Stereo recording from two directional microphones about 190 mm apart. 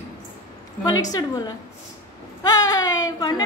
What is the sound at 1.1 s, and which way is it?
A woman's voice, 20° left (ahead or behind).